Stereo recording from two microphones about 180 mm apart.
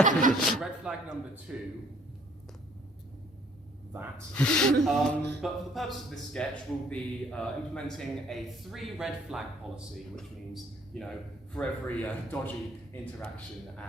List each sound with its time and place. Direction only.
0.0 s speech: 45° right (ahead or behind)
0.5 s speech: 5° right (ahead or behind)
4.4 s speech: 5° left (ahead or behind)